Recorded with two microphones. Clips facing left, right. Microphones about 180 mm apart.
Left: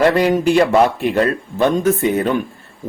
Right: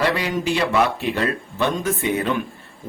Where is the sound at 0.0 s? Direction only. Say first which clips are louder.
Left 8 dB; 50° left (ahead or behind).